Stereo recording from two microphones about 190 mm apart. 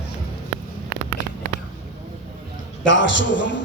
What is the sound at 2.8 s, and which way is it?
Speech, 75° left (ahead or behind).